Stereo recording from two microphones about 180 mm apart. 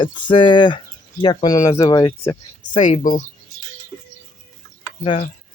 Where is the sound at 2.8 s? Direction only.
45° left (ahead or behind).